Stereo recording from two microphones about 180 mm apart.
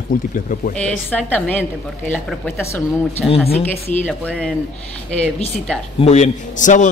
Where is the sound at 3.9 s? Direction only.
10° left (ahead or behind).